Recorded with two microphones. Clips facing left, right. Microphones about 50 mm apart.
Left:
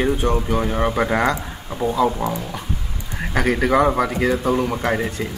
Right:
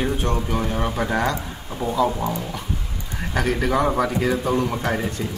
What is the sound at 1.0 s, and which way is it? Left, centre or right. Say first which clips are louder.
Speech: left 3 dB; left.